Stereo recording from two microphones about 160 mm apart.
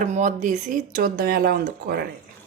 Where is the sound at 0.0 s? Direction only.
50° right (ahead or behind).